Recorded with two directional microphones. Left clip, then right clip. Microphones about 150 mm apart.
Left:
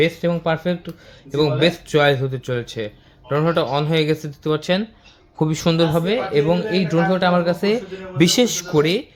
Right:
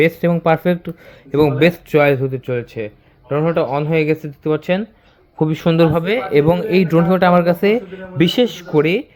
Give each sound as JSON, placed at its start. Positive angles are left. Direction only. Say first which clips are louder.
{"t": 0.0, "sound": "speech", "louder": "right 4 dB", "side_deg": -55}
{"t": 2.0, "sound": "speech", "louder": "right 3 dB", "side_deg": -30}
{"t": 5.7, "sound": "speech", "louder": "right 6 dB", "side_deg": -35}
{"t": 6.0, "sound": "speech", "louder": "right 3 dB", "side_deg": -55}
{"t": 8.2, "sound": "a man's voice", "louder": "right 1 dB", "side_deg": 0}
{"t": 8.8, "sound": "speech", "louder": "right 3 dB", "side_deg": -20}